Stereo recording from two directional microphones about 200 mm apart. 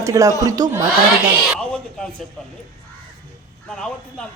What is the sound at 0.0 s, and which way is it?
Speech, 15° right (ahead or behind).